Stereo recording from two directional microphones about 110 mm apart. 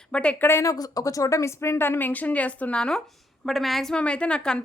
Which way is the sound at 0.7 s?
35° left (ahead or behind).